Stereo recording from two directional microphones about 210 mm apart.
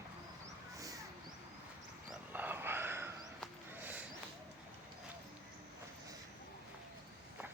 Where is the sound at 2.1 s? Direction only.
10° right (ahead or behind).